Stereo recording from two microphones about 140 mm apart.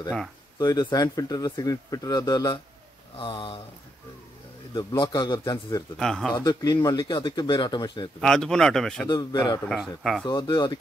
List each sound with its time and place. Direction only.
0.6 s speech: 30° left (ahead or behind)
4.7 s speech: 35° left (ahead or behind)
5.9 s speech: 5° left (ahead or behind)
6.4 s speech: 30° left (ahead or behind)
8.2 s speech: 5° left (ahead or behind)
9.1 s speech: 30° left (ahead or behind)
9.7 s speech: centre (ahead or behind)
10.2 s speech: 30° left (ahead or behind)